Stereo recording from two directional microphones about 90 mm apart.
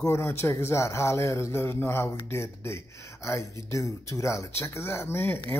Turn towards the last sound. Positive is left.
turn(degrees=25)  # may be behind; listen again after turning